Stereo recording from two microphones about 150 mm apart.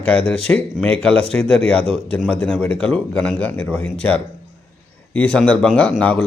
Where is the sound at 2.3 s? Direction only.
10° left (ahead or behind).